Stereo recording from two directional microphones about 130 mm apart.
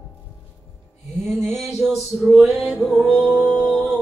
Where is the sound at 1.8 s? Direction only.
20° right (ahead or behind).